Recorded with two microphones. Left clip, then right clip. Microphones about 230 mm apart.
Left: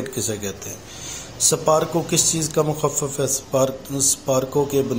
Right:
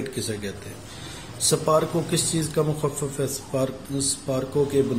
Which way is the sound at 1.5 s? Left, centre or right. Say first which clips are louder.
Left 2 dB; centre.